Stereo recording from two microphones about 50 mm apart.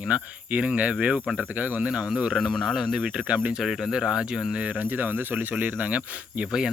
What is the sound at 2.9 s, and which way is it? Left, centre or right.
Cricket, right.